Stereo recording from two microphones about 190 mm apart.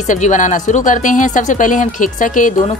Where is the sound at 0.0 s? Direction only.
40° left (ahead or behind).